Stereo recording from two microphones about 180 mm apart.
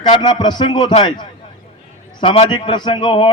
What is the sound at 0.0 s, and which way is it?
A man's voice, 25° left (ahead or behind).